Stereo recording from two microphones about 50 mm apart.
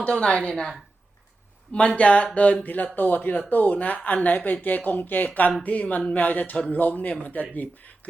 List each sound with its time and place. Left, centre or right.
0.0 s a woman's voice: centre
1.7 s speech: left